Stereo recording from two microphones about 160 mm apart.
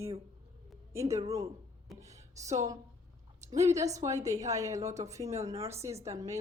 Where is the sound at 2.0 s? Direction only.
20° right (ahead or behind).